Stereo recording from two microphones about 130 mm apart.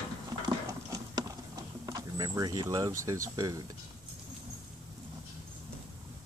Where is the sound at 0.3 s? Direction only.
30° right (ahead or behind).